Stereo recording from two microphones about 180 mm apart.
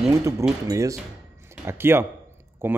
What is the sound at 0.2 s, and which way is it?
Speech, 15° right (ahead or behind).